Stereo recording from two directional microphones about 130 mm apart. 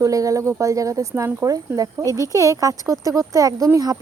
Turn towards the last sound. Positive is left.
turn(degrees=-25)  # may be behind; listen again after turning